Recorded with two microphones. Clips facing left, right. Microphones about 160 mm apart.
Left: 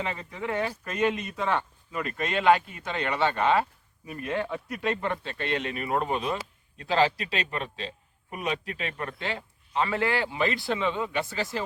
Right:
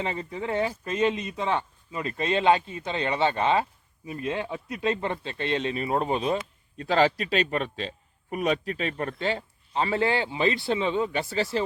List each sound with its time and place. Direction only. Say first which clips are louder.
0.0 s speech: right 2 dB; 30° right (ahead or behind)
6.7 s a man's voice: right 2 dB; 40° right (ahead or behind)
8.4 s a man's voice: right 5 dB; 40° right (ahead or behind)